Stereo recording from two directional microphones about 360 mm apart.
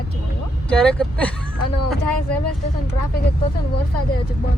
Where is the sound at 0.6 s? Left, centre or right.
Centre.